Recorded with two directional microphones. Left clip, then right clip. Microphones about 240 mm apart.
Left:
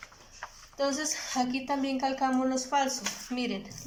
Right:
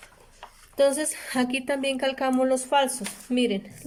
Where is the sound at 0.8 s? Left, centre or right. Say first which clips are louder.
Right 8 dB; right.